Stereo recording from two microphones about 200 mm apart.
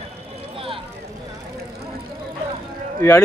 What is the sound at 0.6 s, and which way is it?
Vehicle, 25° right (ahead or behind).